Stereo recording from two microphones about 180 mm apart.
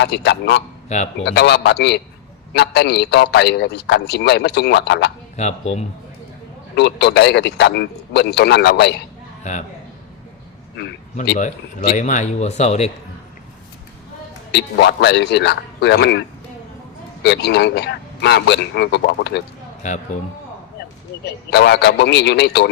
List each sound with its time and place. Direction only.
0.0 s a man's voice: 70° left (ahead or behind)
0.9 s speech: 40° left (ahead or behind)
1.2 s a man's voice: 70° left (ahead or behind)
5.4 s speech: 40° left (ahead or behind)
6.7 s a man's voice: 70° left (ahead or behind)
9.4 s a man's voice: 40° left (ahead or behind)
11.3 s speech: 45° left (ahead or behind)
14.5 s a man's voice: 70° left (ahead or behind)
17.2 s a man's voice: 65° left (ahead or behind)
19.8 s speech: 40° left (ahead or behind)
21.2 s a man's voice: 70° left (ahead or behind)